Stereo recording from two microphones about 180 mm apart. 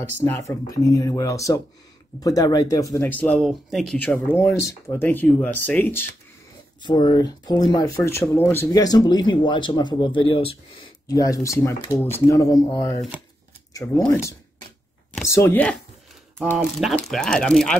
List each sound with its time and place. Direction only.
0.2 s speech: 15° left (ahead or behind)
6.8 s speech: 25° left (ahead or behind)
11.1 s speech: 20° left (ahead or behind); by 17.7 s 5° left (ahead or behind)